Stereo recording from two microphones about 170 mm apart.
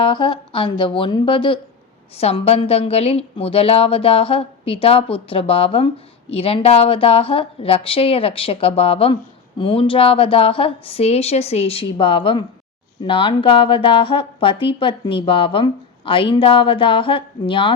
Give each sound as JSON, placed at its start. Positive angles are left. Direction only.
{"t": 0.0, "sound": "speech", "side_deg": 30}